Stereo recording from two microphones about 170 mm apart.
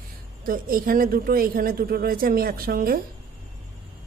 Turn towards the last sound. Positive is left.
turn(degrees=-60)  # may be behind; listen again after turning